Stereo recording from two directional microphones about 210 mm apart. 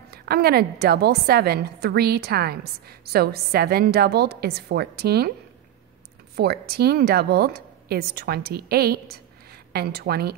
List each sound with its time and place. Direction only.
0.1 s a woman's voice: 50° right (ahead or behind)
6.3 s speech: 50° right (ahead or behind)